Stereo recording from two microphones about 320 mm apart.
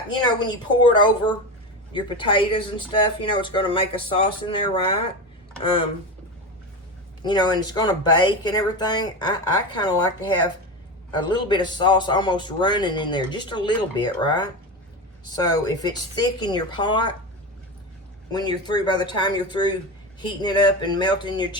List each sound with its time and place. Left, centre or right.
0.1 s a man's voice: centre
7.2 s a man's voice: centre
18.3 s a man's voice: centre